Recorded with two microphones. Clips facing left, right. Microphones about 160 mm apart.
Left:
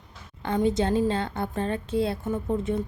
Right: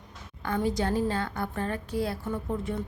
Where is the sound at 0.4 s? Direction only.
25° left (ahead or behind).